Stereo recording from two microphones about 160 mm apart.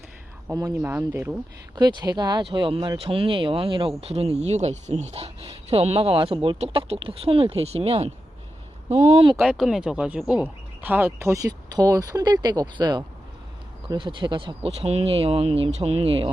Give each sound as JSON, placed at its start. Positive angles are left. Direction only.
{"t": 0.5, "sound": "speech", "side_deg": -20}
{"t": 1.7, "sound": "speech", "side_deg": -25}
{"t": 9.3, "sound": "speech", "side_deg": -5}